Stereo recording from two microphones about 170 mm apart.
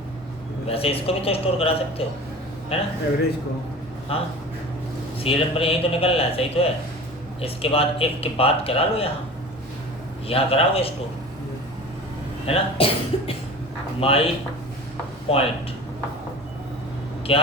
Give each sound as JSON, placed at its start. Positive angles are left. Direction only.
{"t": 0.7, "sound": "speech", "side_deg": 35}
{"t": 4.1, "sound": "speech", "side_deg": 35}
{"t": 10.2, "sound": "speech", "side_deg": 35}
{"t": 12.5, "sound": "speech", "side_deg": 35}
{"t": 15.3, "sound": "speech", "side_deg": 35}
{"t": 17.3, "sound": "speech", "side_deg": 35}